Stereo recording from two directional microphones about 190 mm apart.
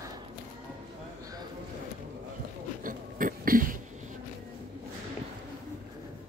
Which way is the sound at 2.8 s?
45° right (ahead or behind).